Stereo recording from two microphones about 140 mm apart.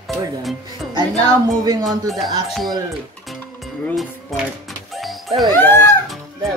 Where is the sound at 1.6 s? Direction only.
25° right (ahead or behind).